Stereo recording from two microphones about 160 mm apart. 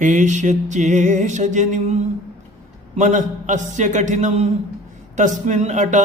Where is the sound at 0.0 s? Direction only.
50° right (ahead or behind).